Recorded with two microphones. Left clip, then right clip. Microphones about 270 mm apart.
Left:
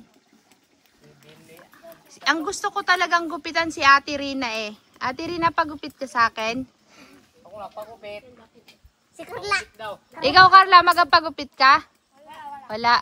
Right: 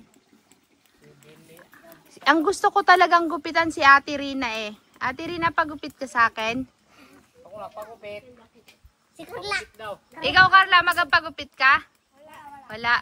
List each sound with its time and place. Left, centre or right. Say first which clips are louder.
1.8 s speech: left 6 dB; centre
9.1 s a child's voice: left 4 dB; left
10.2 s a woman's voice: left 4 dB; centre